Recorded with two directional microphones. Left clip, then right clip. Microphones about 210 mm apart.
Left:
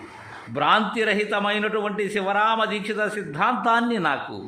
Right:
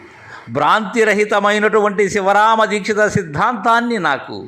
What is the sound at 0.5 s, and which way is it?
A man's voice, 20° right (ahead or behind).